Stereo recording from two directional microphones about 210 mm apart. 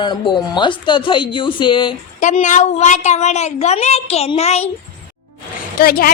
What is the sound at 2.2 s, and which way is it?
A woman's voice, 35° left (ahead or behind).